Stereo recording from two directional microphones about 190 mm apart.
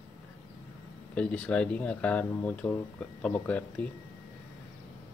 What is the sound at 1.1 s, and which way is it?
Speech, 5° left (ahead or behind).